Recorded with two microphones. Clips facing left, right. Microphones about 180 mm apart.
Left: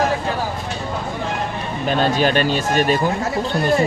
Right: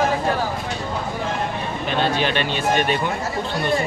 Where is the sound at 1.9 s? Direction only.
40° left (ahead or behind).